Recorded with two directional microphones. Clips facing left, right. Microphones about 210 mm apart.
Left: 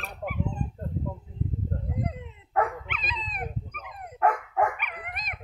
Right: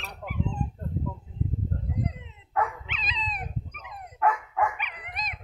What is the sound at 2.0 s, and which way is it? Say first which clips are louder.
Dog: left 1 dB; 50° left (ahead or behind).